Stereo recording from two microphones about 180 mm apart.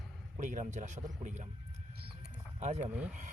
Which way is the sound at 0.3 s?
40° right (ahead or behind).